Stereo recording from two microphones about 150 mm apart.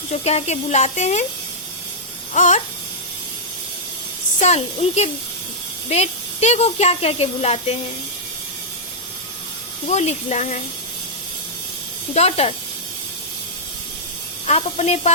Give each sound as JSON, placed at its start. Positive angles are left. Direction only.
{"t": 0.1, "sound": "speech", "side_deg": 45}
{"t": 2.3, "sound": "babbling", "side_deg": 55}
{"t": 4.4, "sound": "speech", "side_deg": 50}
{"t": 9.8, "sound": "speech", "side_deg": 50}
{"t": 12.1, "sound": "speech", "side_deg": 45}
{"t": 14.4, "sound": "speech", "side_deg": 45}